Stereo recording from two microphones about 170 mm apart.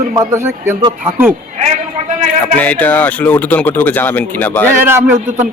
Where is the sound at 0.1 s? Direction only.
15° right (ahead or behind).